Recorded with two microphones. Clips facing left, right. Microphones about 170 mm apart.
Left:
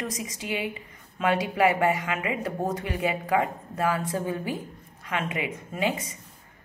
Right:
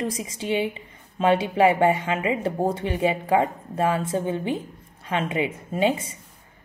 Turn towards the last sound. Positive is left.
turn(degrees=-30)  # may be behind; listen again after turning